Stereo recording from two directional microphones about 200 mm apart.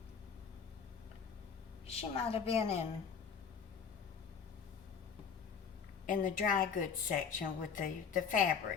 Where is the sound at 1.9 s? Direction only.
30° left (ahead or behind).